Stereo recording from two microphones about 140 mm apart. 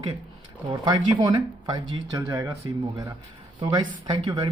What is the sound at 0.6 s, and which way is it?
Speech, 35° right (ahead or behind).